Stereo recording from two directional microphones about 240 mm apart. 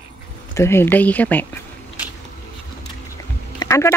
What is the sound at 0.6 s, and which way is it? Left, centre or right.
Speech, centre.